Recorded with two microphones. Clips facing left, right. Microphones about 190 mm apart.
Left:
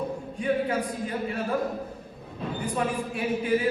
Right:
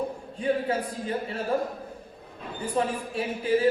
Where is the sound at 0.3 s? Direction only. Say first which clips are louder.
Even; 25° right (ahead or behind).